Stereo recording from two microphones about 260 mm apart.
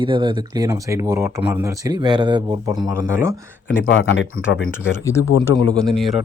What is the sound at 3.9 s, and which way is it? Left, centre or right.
Speech, left.